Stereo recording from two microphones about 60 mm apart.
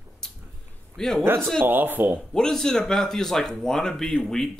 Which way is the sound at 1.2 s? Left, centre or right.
Right.